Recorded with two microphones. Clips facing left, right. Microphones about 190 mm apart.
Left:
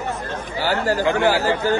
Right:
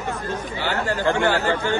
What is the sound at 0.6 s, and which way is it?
Speech, 40° left (ahead or behind).